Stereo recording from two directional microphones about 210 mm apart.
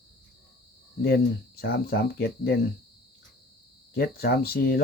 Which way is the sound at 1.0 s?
45° left (ahead or behind).